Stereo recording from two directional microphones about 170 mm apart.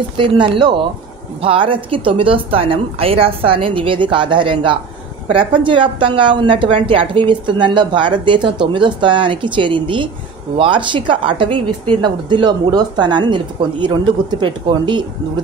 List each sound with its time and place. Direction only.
0.2 s a woman's voice: 25° right (ahead or behind)